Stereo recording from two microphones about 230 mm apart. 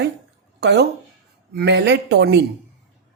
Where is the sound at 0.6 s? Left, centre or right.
Right.